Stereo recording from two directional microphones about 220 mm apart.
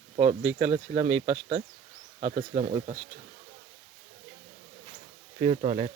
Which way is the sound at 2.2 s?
40° right (ahead or behind).